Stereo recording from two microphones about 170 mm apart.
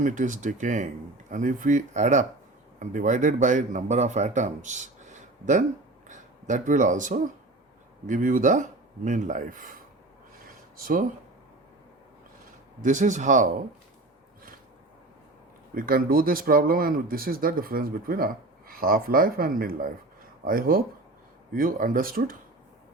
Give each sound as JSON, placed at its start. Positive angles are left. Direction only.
{"t": 0.0, "sound": "speech", "side_deg": -50}
{"t": 12.8, "sound": "speech", "side_deg": -50}
{"t": 15.7, "sound": "speech", "side_deg": -60}